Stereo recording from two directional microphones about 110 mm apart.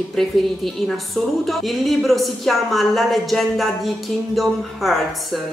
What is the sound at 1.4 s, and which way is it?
Speech, centre (ahead or behind).